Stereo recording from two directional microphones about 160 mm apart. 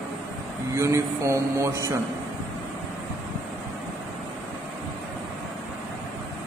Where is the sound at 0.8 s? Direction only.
20° right (ahead or behind).